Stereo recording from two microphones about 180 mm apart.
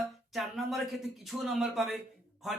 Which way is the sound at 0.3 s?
Centre (ahead or behind).